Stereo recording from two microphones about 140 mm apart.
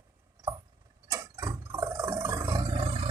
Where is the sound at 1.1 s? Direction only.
20° right (ahead or behind).